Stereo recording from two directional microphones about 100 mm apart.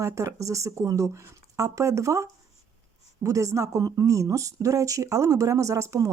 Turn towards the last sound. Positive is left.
turn(degrees=-30)  # may be behind; listen again after turning